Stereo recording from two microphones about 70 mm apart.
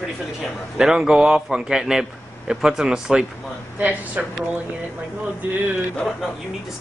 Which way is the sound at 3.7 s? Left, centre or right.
Right.